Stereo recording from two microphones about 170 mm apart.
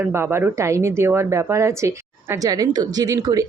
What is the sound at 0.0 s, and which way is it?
Speech, 15° right (ahead or behind).